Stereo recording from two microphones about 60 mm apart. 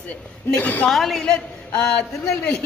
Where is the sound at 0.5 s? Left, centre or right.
Left.